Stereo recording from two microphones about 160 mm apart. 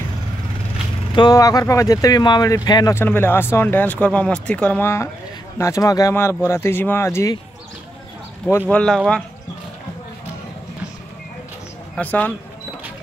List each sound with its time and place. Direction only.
1.1 s speech: 25° left (ahead or behind)
8.5 s speech: 10° left (ahead or behind)
11.9 s speech: 10° left (ahead or behind)